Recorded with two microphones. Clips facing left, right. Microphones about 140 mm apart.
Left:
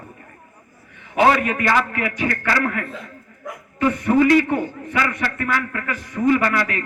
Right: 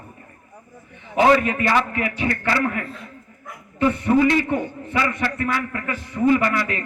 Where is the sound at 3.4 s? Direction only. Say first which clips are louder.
Left 7 dB; 90° left.